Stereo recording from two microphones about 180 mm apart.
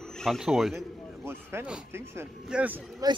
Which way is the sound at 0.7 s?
15° right (ahead or behind).